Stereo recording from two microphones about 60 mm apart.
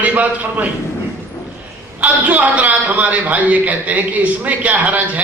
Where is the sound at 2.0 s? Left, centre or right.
Right.